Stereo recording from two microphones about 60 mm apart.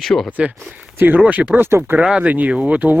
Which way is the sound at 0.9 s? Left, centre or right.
Right.